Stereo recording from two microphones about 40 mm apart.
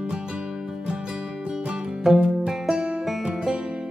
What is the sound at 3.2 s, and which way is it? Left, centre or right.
Music, right.